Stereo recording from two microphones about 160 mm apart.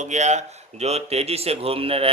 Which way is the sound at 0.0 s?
45° right (ahead or behind).